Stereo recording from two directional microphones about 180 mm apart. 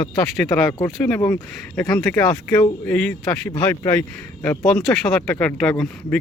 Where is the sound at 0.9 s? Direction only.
Centre (ahead or behind).